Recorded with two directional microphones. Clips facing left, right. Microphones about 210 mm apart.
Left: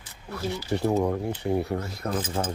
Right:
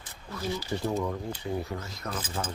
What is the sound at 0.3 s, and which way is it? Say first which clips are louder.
Speech: left 3 dB; 65° left (ahead or behind).